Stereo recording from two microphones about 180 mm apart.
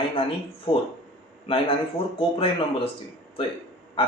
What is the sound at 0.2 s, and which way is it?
A man's voice, 30° left (ahead or behind).